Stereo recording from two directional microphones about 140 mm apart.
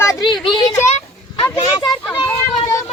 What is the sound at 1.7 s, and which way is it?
Children playing, 25° left (ahead or behind).